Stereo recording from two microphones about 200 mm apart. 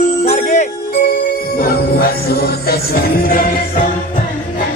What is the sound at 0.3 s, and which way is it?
Music, 40° left (ahead or behind).